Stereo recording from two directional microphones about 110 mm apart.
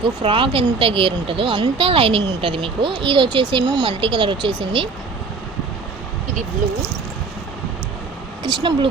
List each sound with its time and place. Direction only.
0.2 s speech: 55° right (ahead or behind)
8.4 s speech: 50° right (ahead or behind)